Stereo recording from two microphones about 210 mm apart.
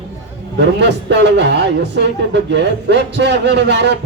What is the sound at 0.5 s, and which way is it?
A woman's voice, 55° right (ahead or behind).